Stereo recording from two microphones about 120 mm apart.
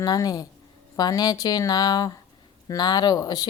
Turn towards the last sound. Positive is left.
turn(degrees=30)  # may be behind; listen again after turning